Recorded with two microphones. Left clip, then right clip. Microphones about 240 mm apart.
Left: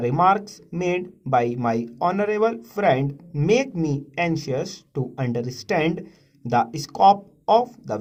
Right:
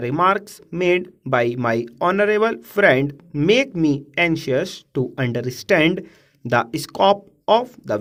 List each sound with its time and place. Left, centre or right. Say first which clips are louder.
0.0 s speech: even; right